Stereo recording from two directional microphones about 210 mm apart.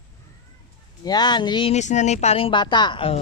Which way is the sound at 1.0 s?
20° left (ahead or behind).